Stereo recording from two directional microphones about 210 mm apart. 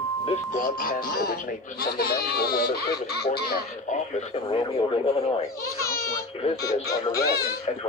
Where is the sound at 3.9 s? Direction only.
30° left (ahead or behind).